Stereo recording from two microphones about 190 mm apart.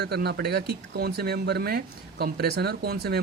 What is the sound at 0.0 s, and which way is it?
Speech, 60° right (ahead or behind).